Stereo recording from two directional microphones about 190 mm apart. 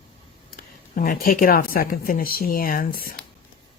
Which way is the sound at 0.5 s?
50° left (ahead or behind).